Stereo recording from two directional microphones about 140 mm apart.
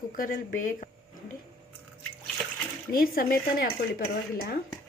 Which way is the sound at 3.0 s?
90° left.